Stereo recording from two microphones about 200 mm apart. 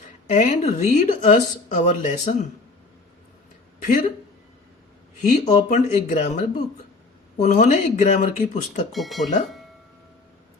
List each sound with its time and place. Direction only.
0.3 s speech: 35° left (ahead or behind)
5.2 s speech: 35° left (ahead or behind)
8.9 s speech: centre (ahead or behind)